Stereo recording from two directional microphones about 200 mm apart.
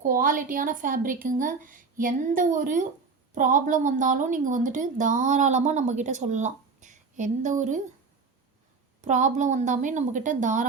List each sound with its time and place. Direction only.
0.0 s a woman's voice: 45° right (ahead or behind)
9.0 s a woman's voice: 40° right (ahead or behind)